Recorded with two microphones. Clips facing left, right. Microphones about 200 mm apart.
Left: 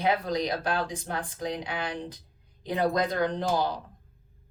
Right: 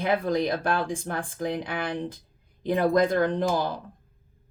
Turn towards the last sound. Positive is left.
turn(degrees=-55)  # may be behind; listen again after turning